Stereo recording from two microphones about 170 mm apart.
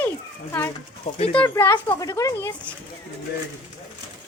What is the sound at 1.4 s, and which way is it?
A child's voice, 15° left (ahead or behind).